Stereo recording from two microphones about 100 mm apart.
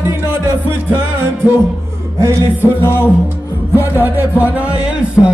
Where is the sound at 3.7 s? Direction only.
20° right (ahead or behind).